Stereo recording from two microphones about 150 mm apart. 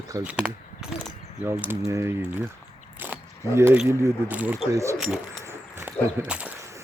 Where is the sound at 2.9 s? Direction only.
15° right (ahead or behind).